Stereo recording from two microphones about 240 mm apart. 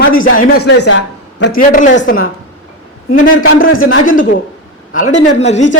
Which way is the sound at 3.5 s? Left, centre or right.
Left.